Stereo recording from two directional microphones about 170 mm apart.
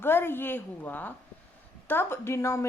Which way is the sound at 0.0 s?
15° left (ahead or behind).